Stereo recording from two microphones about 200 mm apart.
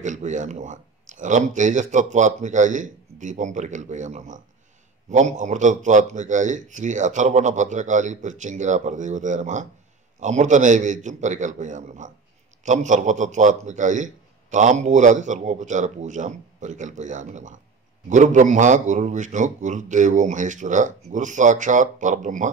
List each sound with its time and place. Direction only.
0.0 s a man's voice: 35° right (ahead or behind)